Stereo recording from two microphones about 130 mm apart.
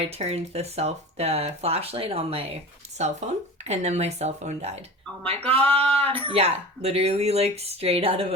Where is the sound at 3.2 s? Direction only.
65° right (ahead or behind).